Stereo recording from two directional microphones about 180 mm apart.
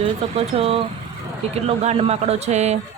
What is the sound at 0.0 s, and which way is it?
Speech, 35° right (ahead or behind).